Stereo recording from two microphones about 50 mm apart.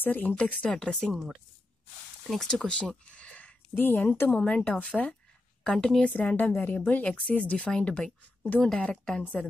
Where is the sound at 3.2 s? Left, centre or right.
Left.